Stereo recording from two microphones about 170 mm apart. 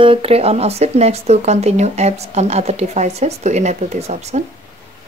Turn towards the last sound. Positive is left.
turn(degrees=-40)  # may be behind; listen again after turning